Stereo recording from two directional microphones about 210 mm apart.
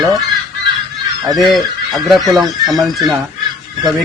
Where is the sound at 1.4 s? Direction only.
Centre (ahead or behind).